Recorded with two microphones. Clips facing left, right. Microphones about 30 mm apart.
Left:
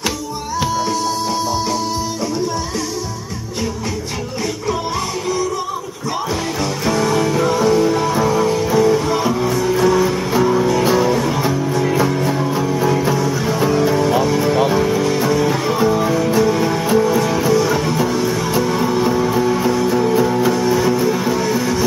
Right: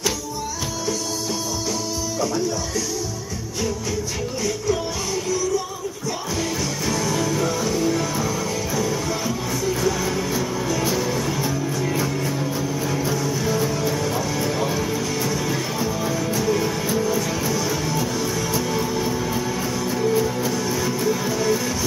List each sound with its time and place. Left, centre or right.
6.9 s music: left
14.1 s music: left
20.4 s music: left